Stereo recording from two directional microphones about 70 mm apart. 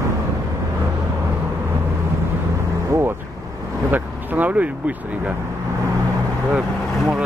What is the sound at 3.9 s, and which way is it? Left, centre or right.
Vehicle, right.